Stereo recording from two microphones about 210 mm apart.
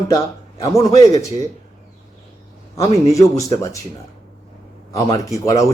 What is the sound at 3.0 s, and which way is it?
Speech, 15° left (ahead or behind).